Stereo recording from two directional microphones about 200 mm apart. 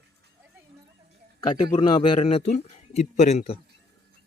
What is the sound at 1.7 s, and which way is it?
A man's voice, 25° left (ahead or behind).